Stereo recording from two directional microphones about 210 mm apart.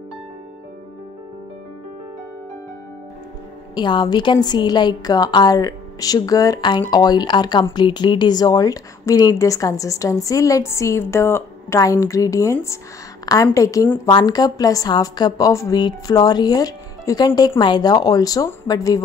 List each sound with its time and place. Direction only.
3.7 s a woman's voice: 20° left (ahead or behind)